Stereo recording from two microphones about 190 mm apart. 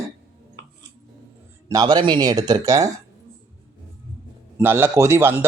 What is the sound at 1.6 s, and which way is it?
Speech, 20° right (ahead or behind).